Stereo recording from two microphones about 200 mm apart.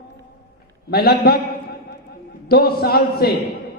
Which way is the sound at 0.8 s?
50° left (ahead or behind).